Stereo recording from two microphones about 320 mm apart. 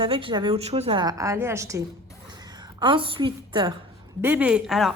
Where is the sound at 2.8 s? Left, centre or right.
Centre.